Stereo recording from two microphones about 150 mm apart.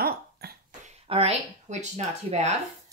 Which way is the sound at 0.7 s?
45° right (ahead or behind).